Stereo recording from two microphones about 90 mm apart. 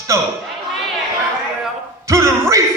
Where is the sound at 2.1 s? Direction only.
30° right (ahead or behind).